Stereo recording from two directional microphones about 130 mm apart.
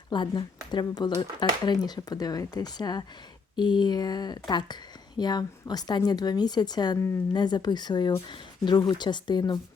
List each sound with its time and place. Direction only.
0.1 s speech: 35° left (ahead or behind)